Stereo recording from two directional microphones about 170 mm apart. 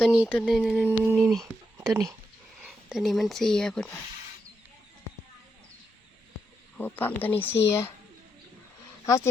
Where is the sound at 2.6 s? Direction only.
5° right (ahead or behind).